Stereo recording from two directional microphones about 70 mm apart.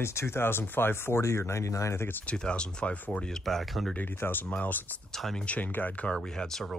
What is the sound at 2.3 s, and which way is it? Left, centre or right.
Speech, centre.